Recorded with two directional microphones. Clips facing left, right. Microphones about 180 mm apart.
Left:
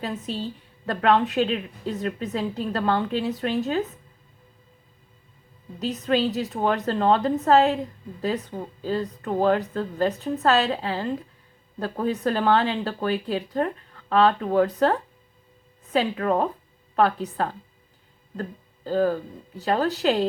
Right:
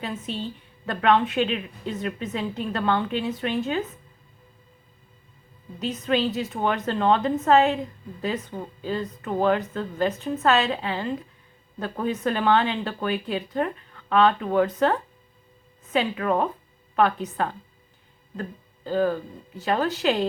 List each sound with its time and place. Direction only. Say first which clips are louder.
0.0 s a woman's voice: left 1 dB; 35° left (ahead or behind)
5.8 s a woman's voice: left 1 dB; 35° left (ahead or behind)
18.9 s a woman's voice: left 1 dB; 40° left (ahead or behind)